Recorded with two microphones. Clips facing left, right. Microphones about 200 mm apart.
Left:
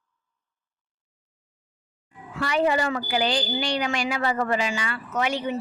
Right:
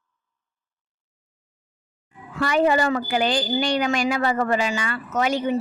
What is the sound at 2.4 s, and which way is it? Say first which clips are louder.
Speech: right 3 dB; 45° right (ahead or behind).